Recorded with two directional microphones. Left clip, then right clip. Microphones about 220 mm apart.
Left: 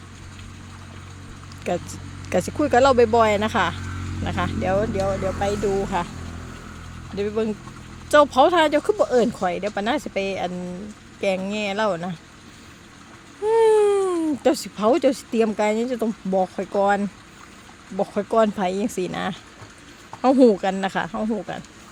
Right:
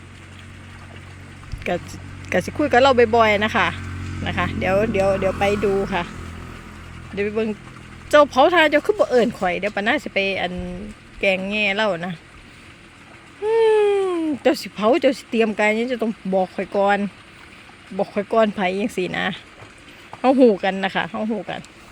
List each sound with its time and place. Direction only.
1.6 s speech: centre (ahead or behind)
4.9 s speech: 20° right (ahead or behind)
7.2 s speech: centre (ahead or behind)
13.4 s speech: 5° left (ahead or behind)